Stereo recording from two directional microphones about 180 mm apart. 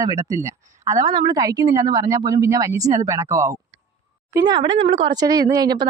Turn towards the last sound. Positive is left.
turn(degrees=-20)  # may be behind; listen again after turning